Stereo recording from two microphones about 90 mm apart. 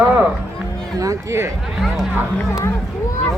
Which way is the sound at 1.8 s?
5° right (ahead or behind).